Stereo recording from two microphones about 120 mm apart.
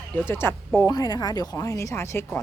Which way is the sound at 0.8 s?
30° left (ahead or behind).